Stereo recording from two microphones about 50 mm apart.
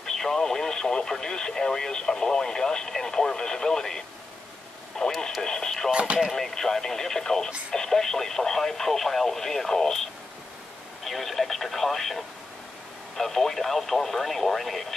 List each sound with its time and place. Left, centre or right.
0.0 s speech: centre
5.9 s speech: right
6.3 s speech: centre
11.1 s speech: centre